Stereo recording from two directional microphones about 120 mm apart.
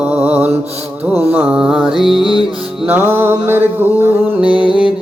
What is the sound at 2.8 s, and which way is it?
Mantra, 15° right (ahead or behind).